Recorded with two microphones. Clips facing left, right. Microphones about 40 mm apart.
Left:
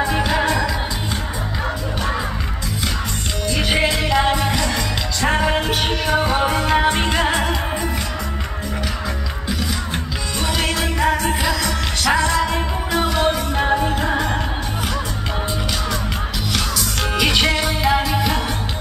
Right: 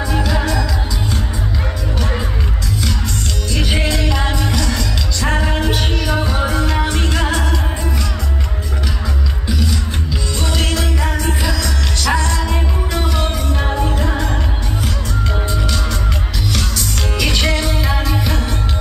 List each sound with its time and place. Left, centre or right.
0.0 s music: left
3.5 s music: centre
10.4 s music: centre
16.5 s music: centre